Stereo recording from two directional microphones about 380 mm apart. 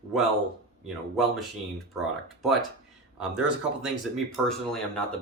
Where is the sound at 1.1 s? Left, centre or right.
Centre.